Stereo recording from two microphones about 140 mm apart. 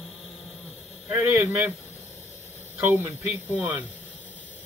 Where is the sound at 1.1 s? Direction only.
15° right (ahead or behind).